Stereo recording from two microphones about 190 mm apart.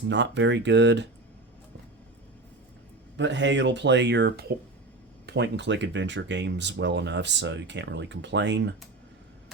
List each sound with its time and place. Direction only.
0.1 s speech: 70° right (ahead or behind)
3.2 s speech: 70° right (ahead or behind)